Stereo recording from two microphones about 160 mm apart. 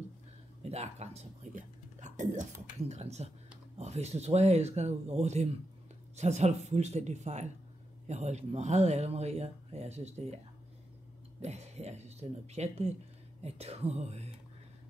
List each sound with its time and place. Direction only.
0.6 s speech: 40° right (ahead or behind)
11.4 s speech: 45° right (ahead or behind)